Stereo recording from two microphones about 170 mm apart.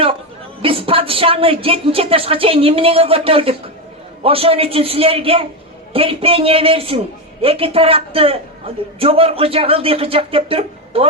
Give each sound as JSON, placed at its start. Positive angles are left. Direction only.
{"t": 0.6, "sound": "a man's voice", "side_deg": -30}